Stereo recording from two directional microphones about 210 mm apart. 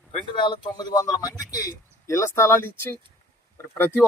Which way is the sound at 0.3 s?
20° left (ahead or behind).